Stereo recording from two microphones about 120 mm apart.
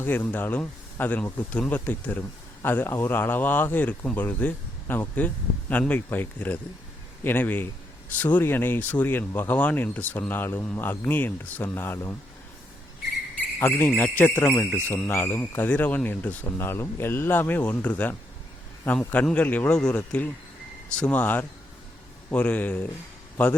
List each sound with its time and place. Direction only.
0.0 s speech: 15° left (ahead or behind)
13.6 s speech: 20° left (ahead or behind)